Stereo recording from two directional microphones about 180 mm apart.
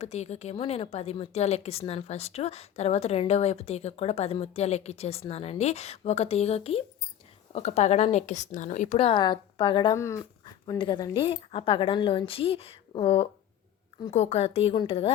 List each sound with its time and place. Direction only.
0.0 s a woman's voice: 35° left (ahead or behind)